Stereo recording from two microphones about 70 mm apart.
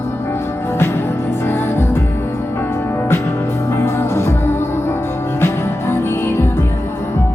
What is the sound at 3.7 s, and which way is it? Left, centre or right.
Music, left.